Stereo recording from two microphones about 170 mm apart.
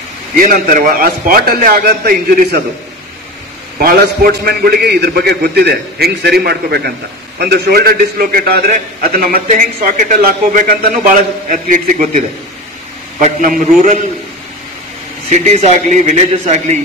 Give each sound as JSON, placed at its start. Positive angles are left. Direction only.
{"t": 0.5, "sound": "a man's voice", "side_deg": -55}
{"t": 3.8, "sound": "a man's voice", "side_deg": -65}
{"t": 13.2, "sound": "a man's voice", "side_deg": -50}
{"t": 15.2, "sound": "a man's voice", "side_deg": -45}